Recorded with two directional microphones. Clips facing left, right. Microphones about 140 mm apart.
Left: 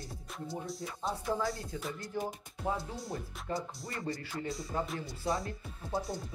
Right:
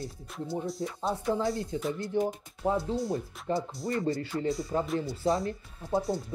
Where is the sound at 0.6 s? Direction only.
Centre (ahead or behind).